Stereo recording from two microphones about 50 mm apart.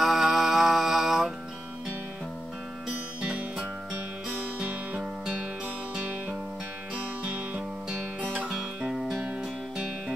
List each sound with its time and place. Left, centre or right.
0.0 s mantra: centre
3.2 s music: right
4.6 s music: centre
7.5 s music: centre
8.5 s music: centre